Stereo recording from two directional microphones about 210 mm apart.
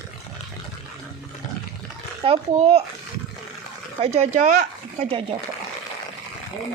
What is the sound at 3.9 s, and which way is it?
Speech, 30° right (ahead or behind).